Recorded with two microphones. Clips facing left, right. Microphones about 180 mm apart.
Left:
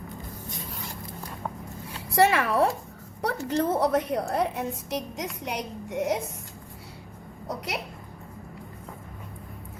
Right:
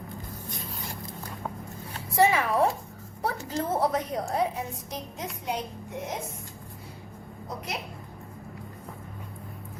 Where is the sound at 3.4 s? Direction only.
70° left (ahead or behind).